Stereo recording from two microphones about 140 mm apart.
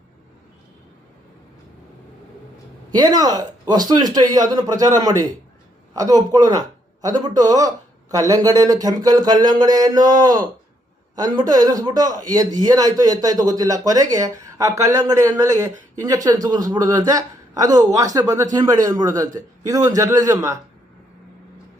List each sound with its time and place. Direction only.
2.9 s a man's voice: 30° right (ahead or behind)
11.1 s a man's voice: 30° right (ahead or behind)